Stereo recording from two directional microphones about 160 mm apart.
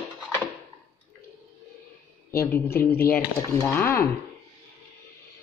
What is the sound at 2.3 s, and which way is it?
Speech, 15° left (ahead or behind).